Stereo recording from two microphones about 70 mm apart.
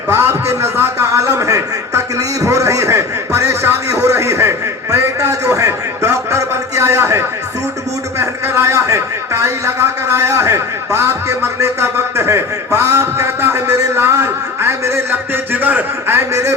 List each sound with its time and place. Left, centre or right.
0.1 s a man's voice: right
2.4 s a sound: right
8.2 s a man's voice: right
15.6 s a man's voice: right
16.1 s a man's voice: right